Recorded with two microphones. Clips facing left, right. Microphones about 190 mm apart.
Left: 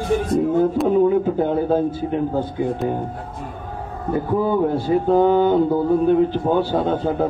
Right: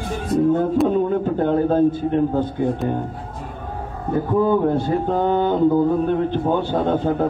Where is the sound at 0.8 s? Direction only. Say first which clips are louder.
Left 2 dB; 5° left (ahead or behind).